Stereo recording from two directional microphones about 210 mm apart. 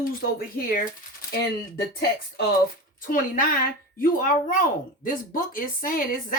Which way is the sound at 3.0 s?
40° left (ahead or behind).